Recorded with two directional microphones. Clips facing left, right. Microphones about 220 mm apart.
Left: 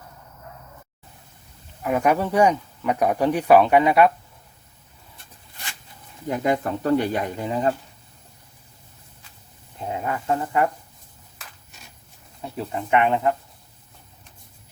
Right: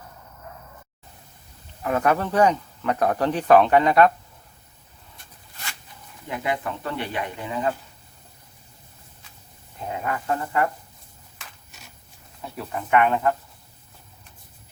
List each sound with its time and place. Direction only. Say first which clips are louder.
1.8 s speech: left 1 dB; 10° left (ahead or behind)
6.2 s speech: left 5 dB; 40° left (ahead or behind)
10.0 s speech: left 2 dB; 20° left (ahead or behind)
12.5 s speech: even; 25° left (ahead or behind)